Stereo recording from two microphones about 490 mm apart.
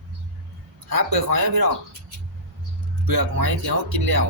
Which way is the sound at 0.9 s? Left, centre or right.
Right.